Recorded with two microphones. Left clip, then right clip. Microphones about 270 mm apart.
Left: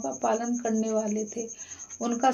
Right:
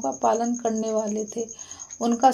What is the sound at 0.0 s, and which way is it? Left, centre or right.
Speech, right.